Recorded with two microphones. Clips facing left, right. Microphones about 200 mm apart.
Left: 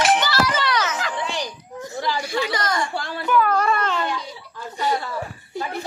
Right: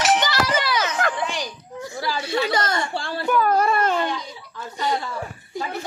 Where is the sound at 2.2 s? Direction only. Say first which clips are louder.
Right 2 dB; 25° right (ahead or behind).